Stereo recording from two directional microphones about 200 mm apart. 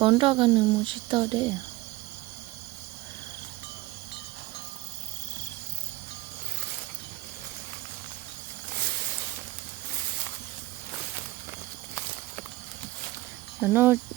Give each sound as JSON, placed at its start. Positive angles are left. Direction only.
{"t": 0.0, "sound": "speech", "side_deg": -25}
{"t": 13.6, "sound": "speech", "side_deg": -10}